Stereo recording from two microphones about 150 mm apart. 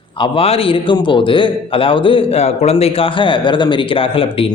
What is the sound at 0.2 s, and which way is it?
A man's voice, 40° left (ahead or behind).